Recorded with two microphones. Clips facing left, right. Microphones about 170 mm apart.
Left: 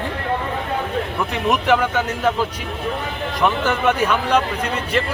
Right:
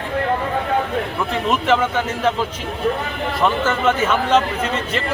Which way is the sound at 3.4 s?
15° left (ahead or behind).